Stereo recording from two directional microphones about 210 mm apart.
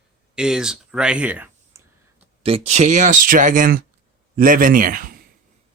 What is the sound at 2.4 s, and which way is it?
Speech, 30° right (ahead or behind).